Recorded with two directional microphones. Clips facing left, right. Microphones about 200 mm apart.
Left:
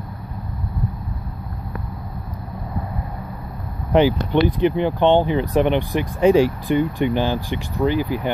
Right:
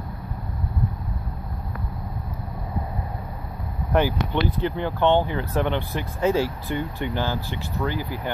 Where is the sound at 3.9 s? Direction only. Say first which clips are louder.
Left 6 dB; 20° left (ahead or behind).